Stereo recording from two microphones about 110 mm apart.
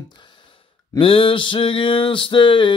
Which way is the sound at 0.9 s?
55° left (ahead or behind).